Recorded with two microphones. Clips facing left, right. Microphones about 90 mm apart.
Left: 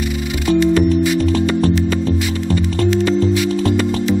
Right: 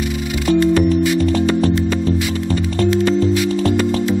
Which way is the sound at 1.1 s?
Centre (ahead or behind).